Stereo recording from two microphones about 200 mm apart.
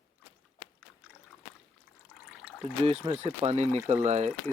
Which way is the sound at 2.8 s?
30° right (ahead or behind).